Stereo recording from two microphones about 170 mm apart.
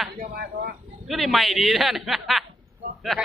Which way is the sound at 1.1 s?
Centre (ahead or behind).